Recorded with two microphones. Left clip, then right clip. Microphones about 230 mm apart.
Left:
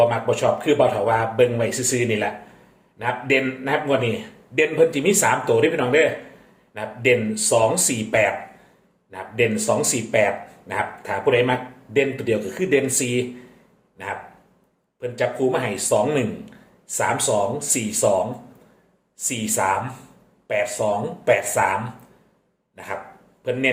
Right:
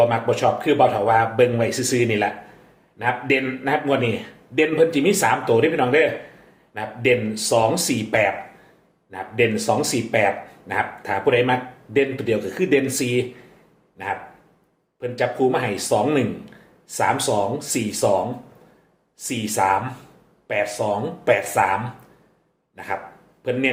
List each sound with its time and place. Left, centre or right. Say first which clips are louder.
0.0 s speech: even; centre
19.2 s speech: right 1 dB; centre
22.7 s dog: right 3 dB; centre
23.4 s a man's voice: right 1 dB; centre